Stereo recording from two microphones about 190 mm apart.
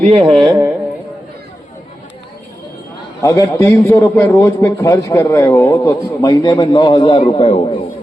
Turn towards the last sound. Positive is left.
turn(degrees=35)  # may be behind; listen again after turning